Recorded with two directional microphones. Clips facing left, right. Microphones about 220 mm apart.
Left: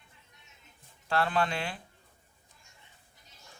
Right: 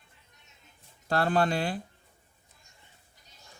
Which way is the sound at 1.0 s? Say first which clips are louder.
Right 3 dB; 40° right (ahead or behind).